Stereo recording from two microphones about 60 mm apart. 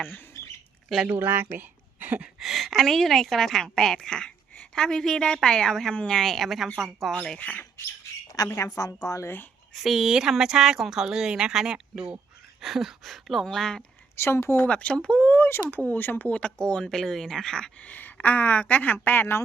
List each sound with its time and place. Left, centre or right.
0.4 s bird: left
1.0 s speech: right
2.4 s a woman's voice: centre
6.3 s a woman's voice: centre
7.3 s a woman's voice: left
8.5 s a woman's voice: left
9.2 s speech: left
9.8 s a woman's voice: centre
13.4 s a woman's voice: centre
14.2 s speech: left
14.7 s a woman's voice: centre
15.3 s a woman's voice: left; by 17.7 s centre
17.7 s a woman's voice: left